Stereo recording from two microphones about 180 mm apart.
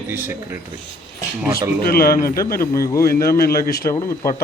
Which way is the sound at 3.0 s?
55° left (ahead or behind).